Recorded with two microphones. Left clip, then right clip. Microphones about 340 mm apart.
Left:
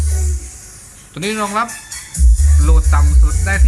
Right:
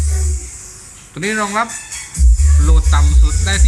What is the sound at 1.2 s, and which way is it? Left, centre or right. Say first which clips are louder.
Speech: right 1 dB; centre.